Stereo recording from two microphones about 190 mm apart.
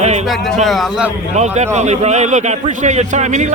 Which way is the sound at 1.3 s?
35° right (ahead or behind).